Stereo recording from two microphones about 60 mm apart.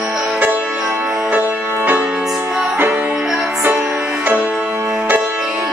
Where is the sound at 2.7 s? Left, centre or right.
Right.